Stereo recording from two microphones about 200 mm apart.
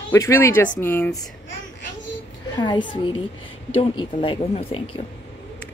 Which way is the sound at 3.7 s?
25° left (ahead or behind).